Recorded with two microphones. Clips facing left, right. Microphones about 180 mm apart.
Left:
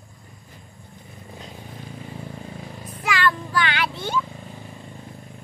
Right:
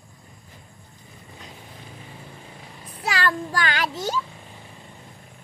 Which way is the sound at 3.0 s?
40° right (ahead or behind).